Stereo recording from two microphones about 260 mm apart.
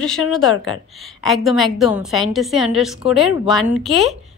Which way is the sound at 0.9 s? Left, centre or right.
Centre.